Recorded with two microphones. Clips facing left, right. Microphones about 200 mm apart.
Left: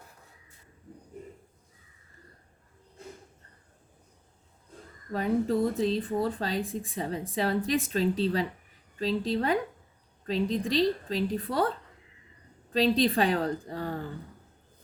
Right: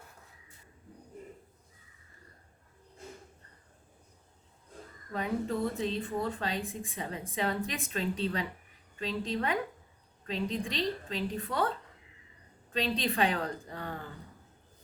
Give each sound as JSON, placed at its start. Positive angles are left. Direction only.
{"t": 5.1, "sound": "speech", "side_deg": 35}
{"t": 12.7, "sound": "speech", "side_deg": 35}